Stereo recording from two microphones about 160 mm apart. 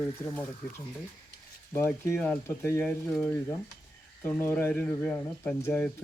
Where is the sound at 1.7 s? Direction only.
15° left (ahead or behind).